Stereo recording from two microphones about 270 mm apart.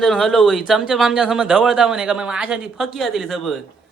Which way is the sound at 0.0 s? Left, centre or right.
Centre.